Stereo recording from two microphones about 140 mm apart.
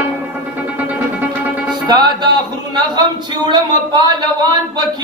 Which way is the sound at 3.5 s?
30° right (ahead or behind).